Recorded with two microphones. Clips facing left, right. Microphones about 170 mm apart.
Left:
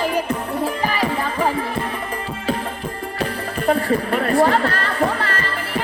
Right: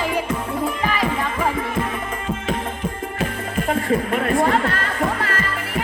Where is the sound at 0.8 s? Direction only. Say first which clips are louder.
Left 1 dB; 35° left (ahead or behind).